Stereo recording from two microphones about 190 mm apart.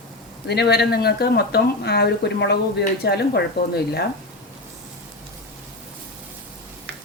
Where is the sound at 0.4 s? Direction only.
60° left (ahead or behind).